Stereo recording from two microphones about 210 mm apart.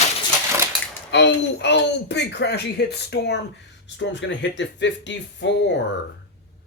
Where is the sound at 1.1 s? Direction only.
55° left (ahead or behind).